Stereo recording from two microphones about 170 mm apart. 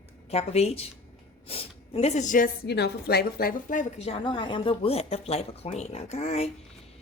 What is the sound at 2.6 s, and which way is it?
A woman's voice, 75° left (ahead or behind).